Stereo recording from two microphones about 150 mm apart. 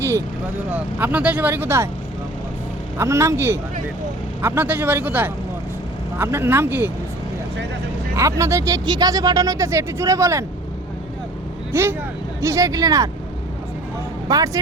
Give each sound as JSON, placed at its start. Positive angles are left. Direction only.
{"t": 0.7, "sound": "speech", "side_deg": -10}
{"t": 3.0, "sound": "speech", "side_deg": -20}
{"t": 8.1, "sound": "speech", "side_deg": -20}
{"t": 11.7, "sound": "speech", "side_deg": -15}
{"t": 14.3, "sound": "speech", "side_deg": -25}